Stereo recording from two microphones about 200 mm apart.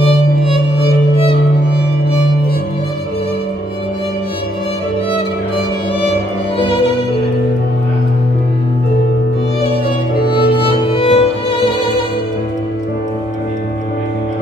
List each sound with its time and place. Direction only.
10.7 s music: 25° left (ahead or behind)